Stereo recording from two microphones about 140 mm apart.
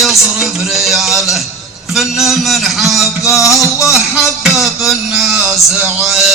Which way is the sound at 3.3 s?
20° left (ahead or behind).